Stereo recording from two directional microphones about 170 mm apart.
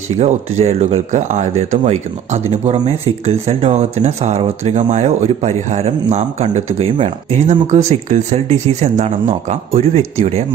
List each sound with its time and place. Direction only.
0.2 s speech: 40° right (ahead or behind)